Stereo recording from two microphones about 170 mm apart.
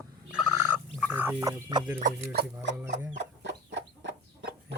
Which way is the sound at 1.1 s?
10° right (ahead or behind).